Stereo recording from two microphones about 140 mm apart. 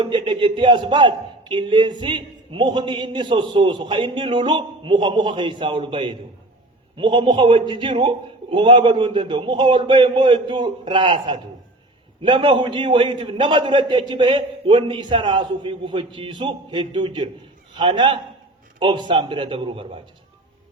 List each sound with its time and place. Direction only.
0.0 s a man's voice: 35° right (ahead or behind)